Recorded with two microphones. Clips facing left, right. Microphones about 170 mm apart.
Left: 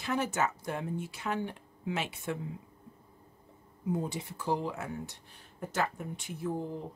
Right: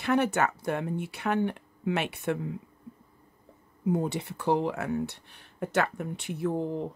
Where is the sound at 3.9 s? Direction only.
65° right (ahead or behind).